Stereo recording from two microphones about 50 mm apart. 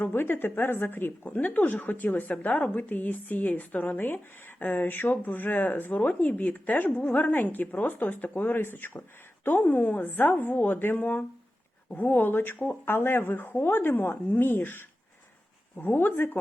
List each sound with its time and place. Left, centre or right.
0.1 s speech: left
1.2 s speech: left
12.0 s speech: left
15.9 s speech: left